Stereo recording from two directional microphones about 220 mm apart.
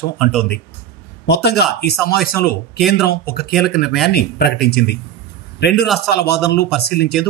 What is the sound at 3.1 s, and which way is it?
Speech, 45° left (ahead or behind).